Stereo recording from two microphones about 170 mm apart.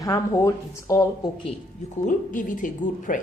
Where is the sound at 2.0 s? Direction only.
50° left (ahead or behind).